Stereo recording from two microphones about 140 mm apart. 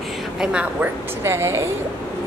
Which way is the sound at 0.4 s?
5° right (ahead or behind).